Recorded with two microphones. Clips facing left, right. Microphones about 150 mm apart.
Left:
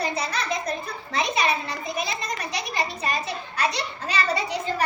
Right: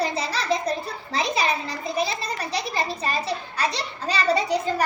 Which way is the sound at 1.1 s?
35° right (ahead or behind).